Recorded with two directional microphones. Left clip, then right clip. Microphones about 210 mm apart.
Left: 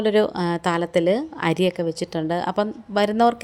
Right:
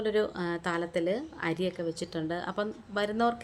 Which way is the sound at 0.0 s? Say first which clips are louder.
Left 9 dB; 30° left (ahead or behind).